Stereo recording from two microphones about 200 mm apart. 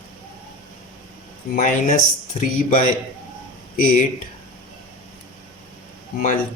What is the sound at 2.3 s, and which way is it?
Speech, 35° left (ahead or behind).